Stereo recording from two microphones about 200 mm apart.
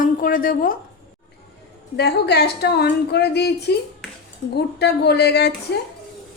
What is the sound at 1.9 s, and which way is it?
A woman's voice, 55° left (ahead or behind).